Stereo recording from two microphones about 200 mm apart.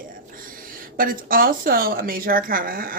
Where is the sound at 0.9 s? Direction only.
45° right (ahead or behind).